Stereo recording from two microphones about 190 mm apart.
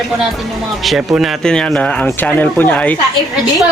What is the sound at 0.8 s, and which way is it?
Speech, centre (ahead or behind).